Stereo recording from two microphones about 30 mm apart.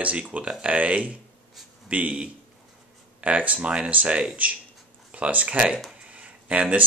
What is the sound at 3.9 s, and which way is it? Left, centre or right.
Speech, right.